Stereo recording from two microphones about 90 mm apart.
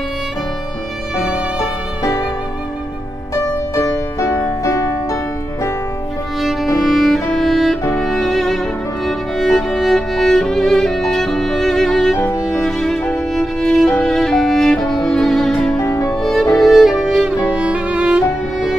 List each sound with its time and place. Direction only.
3.7 s music: 35° left (ahead or behind)
6.4 s music: centre (ahead or behind)
15.8 s music: 35° left (ahead or behind)
16.1 s music: centre (ahead or behind)